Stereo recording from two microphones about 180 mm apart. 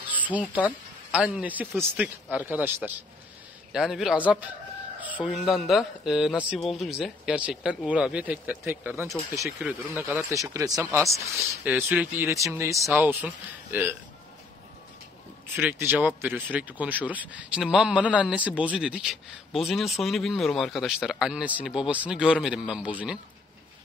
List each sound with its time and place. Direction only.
0.0 s speech: 10° right (ahead or behind)
15.4 s speech: 10° right (ahead or behind)